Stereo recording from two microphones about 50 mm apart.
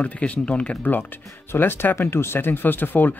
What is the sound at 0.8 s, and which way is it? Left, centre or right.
Speech, left.